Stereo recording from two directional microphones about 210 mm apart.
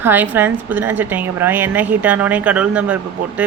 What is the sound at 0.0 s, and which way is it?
Speech, 10° right (ahead or behind).